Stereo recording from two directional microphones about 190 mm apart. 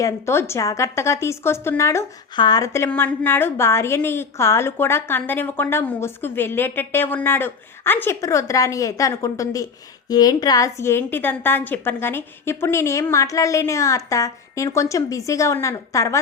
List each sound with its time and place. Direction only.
0.0 s a woman's voice: 15° left (ahead or behind)